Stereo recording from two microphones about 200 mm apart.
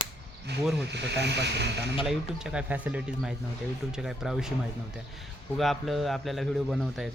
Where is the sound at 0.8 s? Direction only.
60° right (ahead or behind).